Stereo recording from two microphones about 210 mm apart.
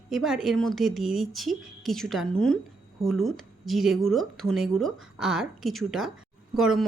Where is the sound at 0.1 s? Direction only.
Centre (ahead or behind).